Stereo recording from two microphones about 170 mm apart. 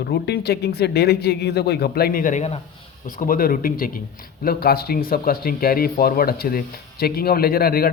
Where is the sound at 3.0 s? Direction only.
55° left (ahead or behind).